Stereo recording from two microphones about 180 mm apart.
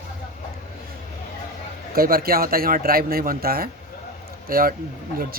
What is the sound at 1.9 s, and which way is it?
Speech, 55° right (ahead or behind).